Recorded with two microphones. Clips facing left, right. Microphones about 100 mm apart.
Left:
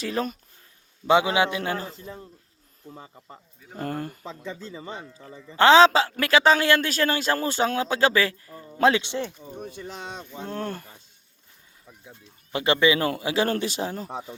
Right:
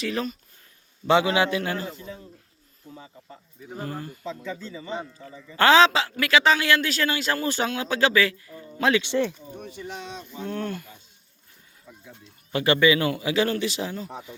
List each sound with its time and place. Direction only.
0.0 s a man's voice: 30° left (ahead or behind)
1.0 s a man's voice: 20° left (ahead or behind)
3.8 s speech: 55° left (ahead or behind)
5.5 s a man's voice: 25° left (ahead or behind); by 7.4 s 40° left (ahead or behind)
7.4 s a man's voice: 25° left (ahead or behind)
11.9 s a man's voice: 20° left (ahead or behind); by 14.1 s 40° left (ahead or behind)